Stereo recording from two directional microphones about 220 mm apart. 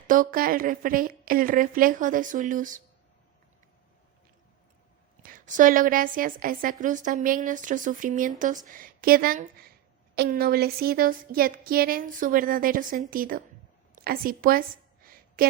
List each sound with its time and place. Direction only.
0.1 s a woman's voice: 40° right (ahead or behind)
5.2 s a woman's voice: 35° right (ahead or behind)
15.0 s a sound: 40° right (ahead or behind)